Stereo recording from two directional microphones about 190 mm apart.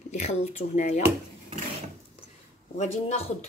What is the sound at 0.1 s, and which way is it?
Speech, 35° left (ahead or behind).